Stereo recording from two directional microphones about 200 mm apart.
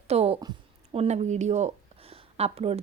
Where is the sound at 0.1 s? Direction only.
30° right (ahead or behind).